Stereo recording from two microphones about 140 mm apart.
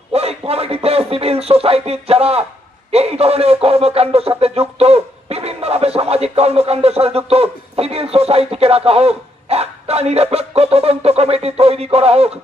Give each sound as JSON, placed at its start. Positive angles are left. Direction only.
{"t": 0.1, "sound": "music", "side_deg": -45}
{"t": 2.9, "sound": "speech", "side_deg": -50}